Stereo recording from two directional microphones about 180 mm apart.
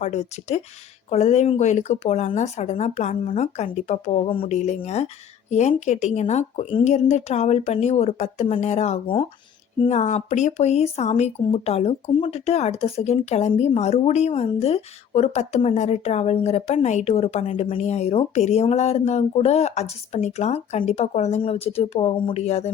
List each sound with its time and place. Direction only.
0.0 s speech: 40° left (ahead or behind)